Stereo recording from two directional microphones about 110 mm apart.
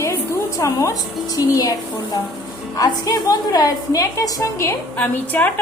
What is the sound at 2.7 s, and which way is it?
A woman's voice, 35° left (ahead or behind).